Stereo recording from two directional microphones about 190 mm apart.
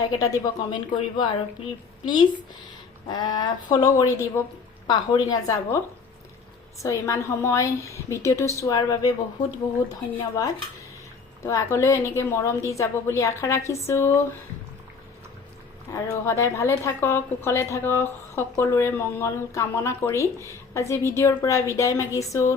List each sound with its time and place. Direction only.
0.1 s speech: 20° left (ahead or behind)
3.1 s speech: 20° left (ahead or behind)
6.8 s a woman's voice: 15° left (ahead or behind)
10.2 s a woman's voice: 20° left (ahead or behind)
15.9 s a woman's voice: 15° left (ahead or behind)